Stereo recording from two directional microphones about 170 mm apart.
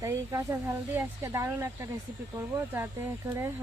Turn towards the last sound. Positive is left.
turn(degrees=-15)  # may be behind; listen again after turning